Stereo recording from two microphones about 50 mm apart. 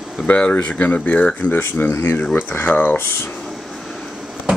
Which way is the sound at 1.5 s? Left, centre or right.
Left.